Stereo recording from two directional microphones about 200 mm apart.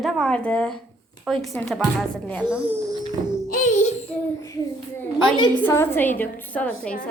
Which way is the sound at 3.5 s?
40° left (ahead or behind).